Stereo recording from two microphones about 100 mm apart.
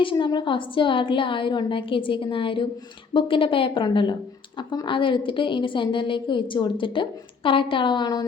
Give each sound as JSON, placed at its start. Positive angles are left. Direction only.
{"t": 0.0, "sound": "speech", "side_deg": 55}